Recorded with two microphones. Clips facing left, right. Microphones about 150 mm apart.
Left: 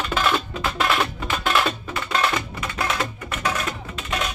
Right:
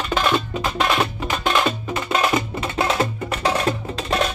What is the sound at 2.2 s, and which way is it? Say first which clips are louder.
Music: right 4 dB; 25° right (ahead or behind).